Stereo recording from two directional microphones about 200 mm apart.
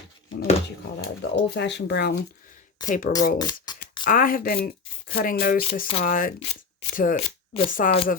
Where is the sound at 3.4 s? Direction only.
20° left (ahead or behind).